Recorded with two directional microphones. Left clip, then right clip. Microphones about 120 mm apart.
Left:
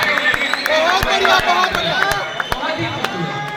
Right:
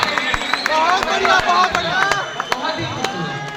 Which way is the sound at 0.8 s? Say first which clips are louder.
Even; 35° left (ahead or behind).